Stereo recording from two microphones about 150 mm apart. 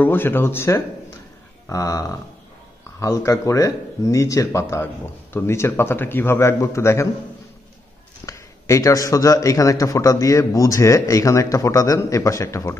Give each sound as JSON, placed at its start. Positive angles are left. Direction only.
{"t": 0.0, "sound": "a man's voice", "side_deg": 15}
{"t": 8.3, "sound": "a man's voice", "side_deg": 20}